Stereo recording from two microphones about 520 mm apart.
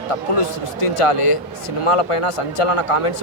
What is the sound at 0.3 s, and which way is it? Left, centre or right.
Speech, left.